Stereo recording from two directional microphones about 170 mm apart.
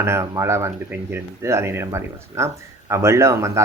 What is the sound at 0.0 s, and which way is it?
Speech, 15° right (ahead or behind).